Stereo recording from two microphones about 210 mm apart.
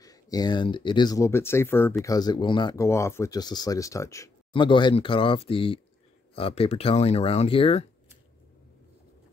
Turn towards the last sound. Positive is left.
turn(degrees=25)  # may be behind; listen again after turning